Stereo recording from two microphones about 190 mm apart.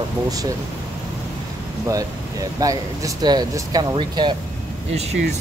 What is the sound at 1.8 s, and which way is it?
Speech, 20° right (ahead or behind).